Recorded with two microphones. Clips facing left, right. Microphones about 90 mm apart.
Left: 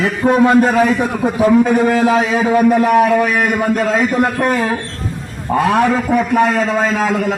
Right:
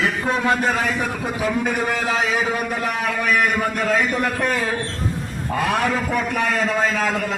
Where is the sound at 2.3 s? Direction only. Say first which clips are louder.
Left 11 dB; 35° left (ahead or behind).